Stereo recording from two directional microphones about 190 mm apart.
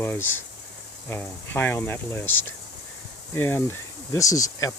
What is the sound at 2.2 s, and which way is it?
Speech, 90° left.